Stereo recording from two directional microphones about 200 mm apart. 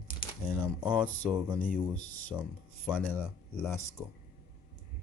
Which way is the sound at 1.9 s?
90° left.